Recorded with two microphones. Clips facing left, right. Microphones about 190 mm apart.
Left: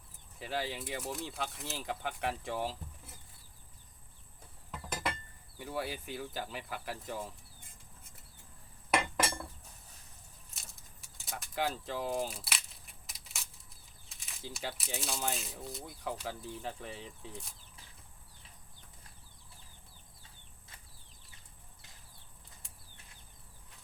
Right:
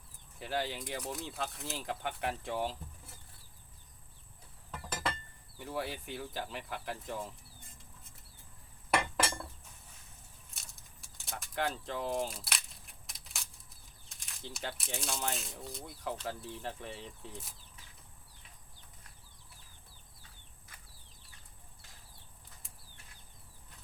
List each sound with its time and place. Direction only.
0.3 s speech: centre (ahead or behind)
5.5 s speech: centre (ahead or behind)
9.0 s cutlery: 25° left (ahead or behind)
10.5 s a sound: centre (ahead or behind)
14.1 s speech: centre (ahead or behind)